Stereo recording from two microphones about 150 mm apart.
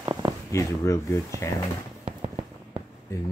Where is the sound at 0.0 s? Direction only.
25° right (ahead or behind).